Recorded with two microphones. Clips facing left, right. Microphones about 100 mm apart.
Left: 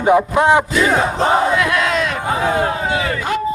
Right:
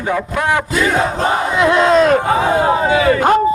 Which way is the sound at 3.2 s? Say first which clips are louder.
Right 8 dB; 50° right (ahead or behind).